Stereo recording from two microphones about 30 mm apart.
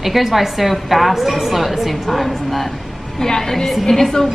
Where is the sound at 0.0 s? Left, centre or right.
Centre.